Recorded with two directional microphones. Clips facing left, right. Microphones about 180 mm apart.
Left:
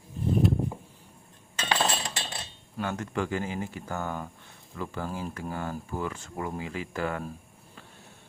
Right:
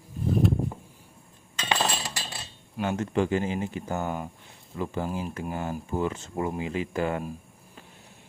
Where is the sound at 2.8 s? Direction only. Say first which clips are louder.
Right 5 dB; 20° right (ahead or behind).